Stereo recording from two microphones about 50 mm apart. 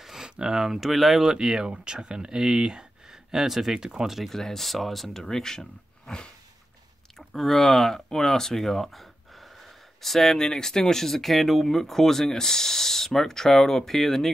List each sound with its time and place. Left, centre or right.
0.0 s a sound: centre
0.4 s speech: centre
4.2 s speech: centre